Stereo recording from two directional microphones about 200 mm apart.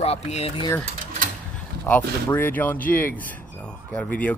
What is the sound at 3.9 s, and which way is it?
Speech, 5° left (ahead or behind).